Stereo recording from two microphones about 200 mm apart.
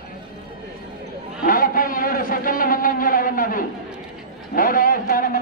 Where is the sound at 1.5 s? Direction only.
45° left (ahead or behind).